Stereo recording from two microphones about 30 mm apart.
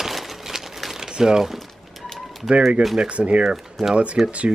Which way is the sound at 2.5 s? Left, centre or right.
Right.